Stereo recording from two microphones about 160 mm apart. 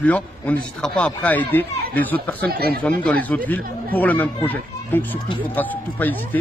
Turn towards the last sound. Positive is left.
turn(degrees=10)  # may be behind; listen again after turning